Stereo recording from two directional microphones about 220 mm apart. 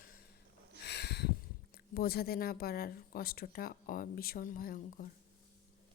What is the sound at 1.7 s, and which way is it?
Speech, 45° left (ahead or behind).